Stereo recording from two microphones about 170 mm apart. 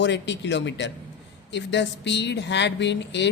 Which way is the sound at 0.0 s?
90° left.